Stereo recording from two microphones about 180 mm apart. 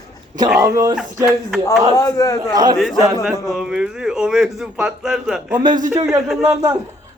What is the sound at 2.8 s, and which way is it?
Speech, centre (ahead or behind).